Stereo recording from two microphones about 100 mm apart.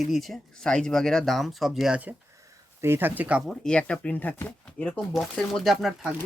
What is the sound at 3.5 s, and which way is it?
Speech, 10° left (ahead or behind).